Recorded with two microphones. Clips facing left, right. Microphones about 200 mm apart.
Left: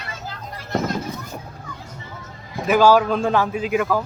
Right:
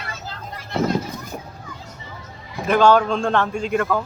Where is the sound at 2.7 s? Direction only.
5° left (ahead or behind).